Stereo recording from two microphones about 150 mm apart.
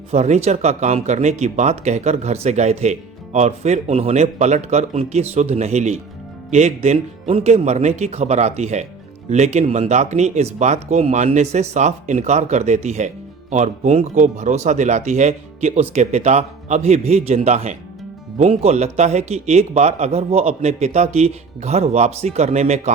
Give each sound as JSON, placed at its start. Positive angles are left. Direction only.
{"t": 0.1, "sound": "speech", "side_deg": -45}